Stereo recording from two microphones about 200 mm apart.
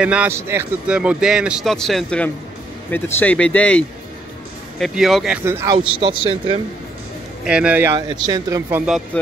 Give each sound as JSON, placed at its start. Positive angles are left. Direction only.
{"t": 0.0, "sound": "speech", "side_deg": -5}
{"t": 5.4, "sound": "speech", "side_deg": -10}
{"t": 5.9, "sound": "speech", "side_deg": -25}
{"t": 7.4, "sound": "speech", "side_deg": -5}